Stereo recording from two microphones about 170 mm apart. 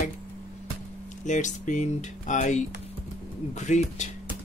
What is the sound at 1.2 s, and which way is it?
Speech, 45° left (ahead or behind).